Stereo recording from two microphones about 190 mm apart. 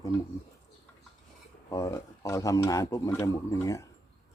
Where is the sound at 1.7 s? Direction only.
15° left (ahead or behind).